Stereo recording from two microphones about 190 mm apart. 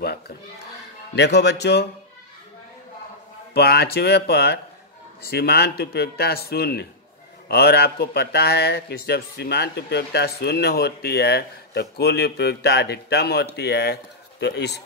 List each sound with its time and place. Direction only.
0.0 s a sound: 55° left (ahead or behind)
1.1 s a man's voice: 60° left (ahead or behind)
3.5 s a man's voice: 55° left (ahead or behind)